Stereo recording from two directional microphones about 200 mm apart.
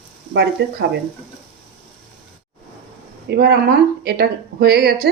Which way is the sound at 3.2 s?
55° right (ahead or behind).